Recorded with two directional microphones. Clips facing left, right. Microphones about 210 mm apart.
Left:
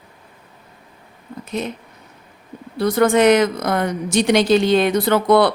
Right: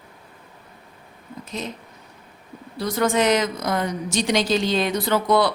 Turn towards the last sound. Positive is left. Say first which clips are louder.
# left 5 dB
turn(degrees=60)  # may be behind; listen again after turning